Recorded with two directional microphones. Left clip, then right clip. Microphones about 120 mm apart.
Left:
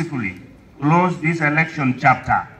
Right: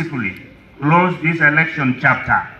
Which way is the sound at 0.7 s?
20° right (ahead or behind).